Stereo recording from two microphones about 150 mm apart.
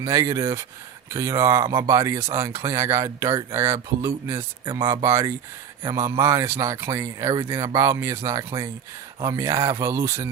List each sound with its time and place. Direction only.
0.0 s speech: 20° right (ahead or behind)
4.6 s speech: 35° right (ahead or behind)
5.0 s speech: 20° right (ahead or behind)